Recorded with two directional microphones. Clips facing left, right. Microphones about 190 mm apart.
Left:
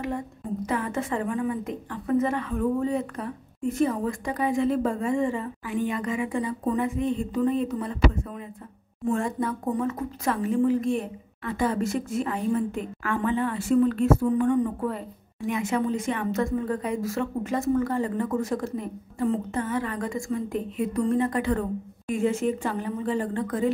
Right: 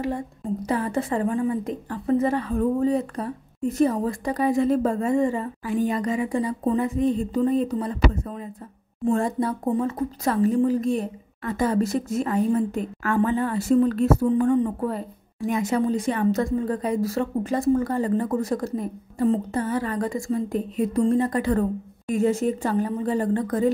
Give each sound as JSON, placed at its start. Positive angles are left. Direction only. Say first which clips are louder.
{"t": 0.7, "sound": "a woman's voice", "louder": "right 3 dB", "side_deg": -35}